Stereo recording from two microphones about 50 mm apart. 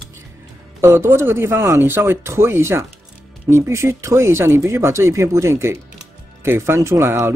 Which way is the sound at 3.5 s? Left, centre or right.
Right.